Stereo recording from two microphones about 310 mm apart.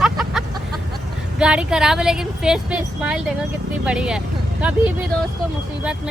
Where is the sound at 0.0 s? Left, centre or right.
Centre.